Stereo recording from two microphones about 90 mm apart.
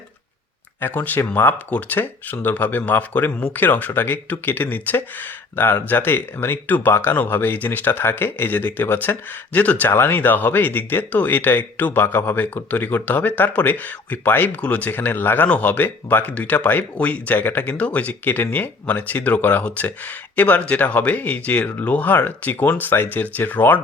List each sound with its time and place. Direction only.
0.8 s speech: 20° left (ahead or behind)